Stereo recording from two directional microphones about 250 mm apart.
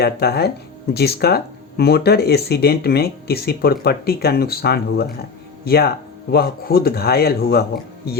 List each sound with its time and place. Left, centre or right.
0.0 s speech: left